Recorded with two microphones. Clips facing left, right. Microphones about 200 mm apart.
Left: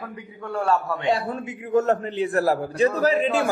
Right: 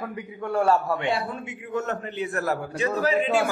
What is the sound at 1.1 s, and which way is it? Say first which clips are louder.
A man's voice: left 4 dB; 35° left (ahead or behind).